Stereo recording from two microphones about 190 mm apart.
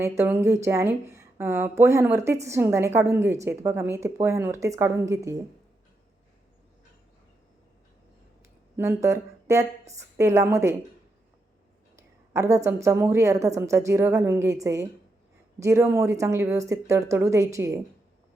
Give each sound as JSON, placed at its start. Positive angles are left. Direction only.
{"t": 0.0, "sound": "speech", "side_deg": -15}
{"t": 8.7, "sound": "speech", "side_deg": -15}
{"t": 11.9, "sound": "a woman's voice", "side_deg": -15}